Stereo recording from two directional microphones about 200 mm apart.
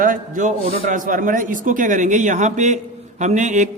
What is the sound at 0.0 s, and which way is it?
A man's voice, 40° right (ahead or behind).